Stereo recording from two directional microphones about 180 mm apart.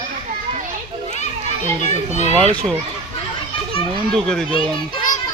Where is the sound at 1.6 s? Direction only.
35° right (ahead or behind).